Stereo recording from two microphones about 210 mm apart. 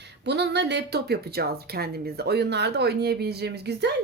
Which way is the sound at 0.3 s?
55° right (ahead or behind).